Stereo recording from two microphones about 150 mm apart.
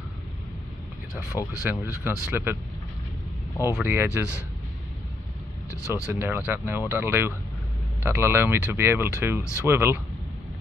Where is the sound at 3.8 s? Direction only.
15° right (ahead or behind).